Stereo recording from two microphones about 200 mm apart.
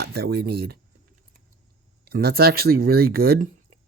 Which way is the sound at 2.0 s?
50° right (ahead or behind).